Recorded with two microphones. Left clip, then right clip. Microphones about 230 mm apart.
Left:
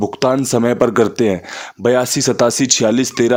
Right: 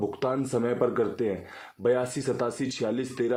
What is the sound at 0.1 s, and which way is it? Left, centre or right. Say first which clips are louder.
Speech: left 13 dB; left.